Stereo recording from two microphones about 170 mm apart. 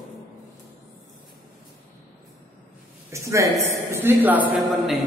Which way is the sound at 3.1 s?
15° right (ahead or behind).